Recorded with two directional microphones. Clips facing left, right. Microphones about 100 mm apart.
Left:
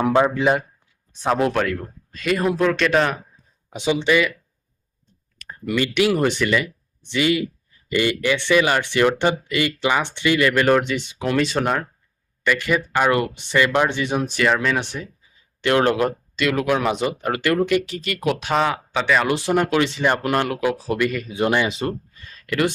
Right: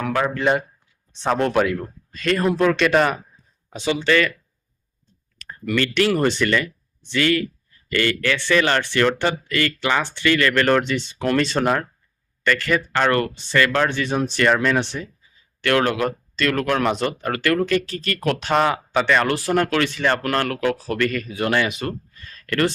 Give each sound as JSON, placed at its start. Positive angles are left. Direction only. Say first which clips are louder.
{"t": 0.0, "sound": "speech", "louder": "left 5 dB", "side_deg": 20}
{"t": 0.3, "sound": "speech", "louder": "left 1 dB", "side_deg": 5}
{"t": 2.2, "sound": "speech", "louder": "right 1 dB", "side_deg": 5}
{"t": 3.7, "sound": "speech", "louder": "left 1 dB", "side_deg": 15}
{"t": 5.4, "sound": "speech", "louder": "even", "side_deg": 15}
{"t": 15.6, "sound": "speech", "louder": "left 2 dB", "side_deg": 20}
{"t": 19.3, "sound": "speech", "louder": "left 1 dB", "side_deg": 15}
{"t": 22.4, "sound": "speech", "louder": "even", "side_deg": 10}